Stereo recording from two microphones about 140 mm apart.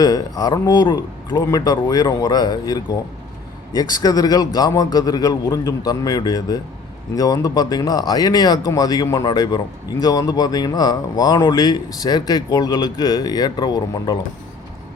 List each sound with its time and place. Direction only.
0.0 s speech: 25° left (ahead or behind)